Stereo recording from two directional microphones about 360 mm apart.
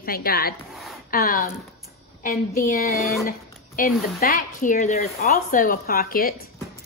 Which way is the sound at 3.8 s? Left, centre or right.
Left.